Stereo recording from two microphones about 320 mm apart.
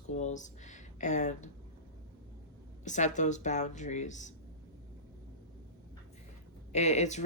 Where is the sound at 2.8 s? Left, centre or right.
Left.